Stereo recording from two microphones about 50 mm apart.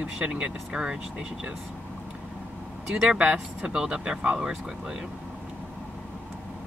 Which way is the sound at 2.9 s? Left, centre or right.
Right.